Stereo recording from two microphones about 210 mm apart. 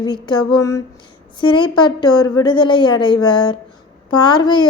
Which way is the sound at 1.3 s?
25° left (ahead or behind).